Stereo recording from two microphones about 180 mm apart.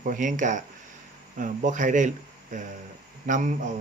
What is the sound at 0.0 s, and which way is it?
Speech, 45° right (ahead or behind).